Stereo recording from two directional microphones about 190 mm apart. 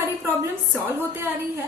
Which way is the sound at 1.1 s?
15° right (ahead or behind).